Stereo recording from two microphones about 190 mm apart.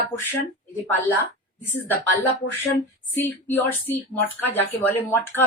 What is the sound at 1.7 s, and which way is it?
Speech, 10° left (ahead or behind).